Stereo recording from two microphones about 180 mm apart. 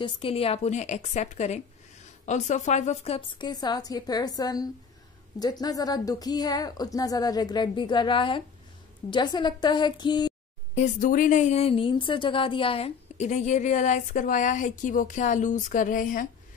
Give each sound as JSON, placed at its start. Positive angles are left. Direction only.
{"t": 0.0, "sound": "a woman's voice", "side_deg": 30}
{"t": 10.7, "sound": "a woman's voice", "side_deg": 40}